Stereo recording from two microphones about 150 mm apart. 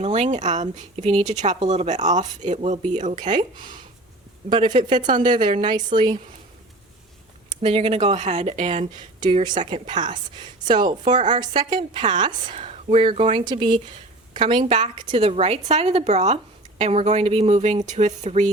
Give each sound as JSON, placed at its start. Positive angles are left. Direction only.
{"t": 0.0, "sound": "a woman's voice", "side_deg": -45}
{"t": 4.6, "sound": "speech", "side_deg": -55}
{"t": 4.9, "sound": "speech", "side_deg": -30}
{"t": 7.6, "sound": "a woman's voice", "side_deg": -40}
{"t": 9.2, "sound": "speech", "side_deg": -30}
{"t": 9.6, "sound": "a woman's voice", "side_deg": -50}
{"t": 9.8, "sound": "speech", "side_deg": -30}
{"t": 12.5, "sound": "a woman's voice", "side_deg": -45}